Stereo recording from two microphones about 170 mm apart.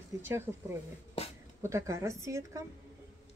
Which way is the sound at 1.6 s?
15° right (ahead or behind).